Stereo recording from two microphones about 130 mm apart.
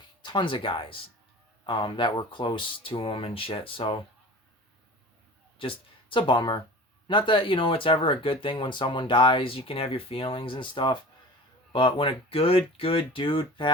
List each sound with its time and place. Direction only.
0.2 s speech: 35° left (ahead or behind)
5.5 s speech: 40° left (ahead or behind)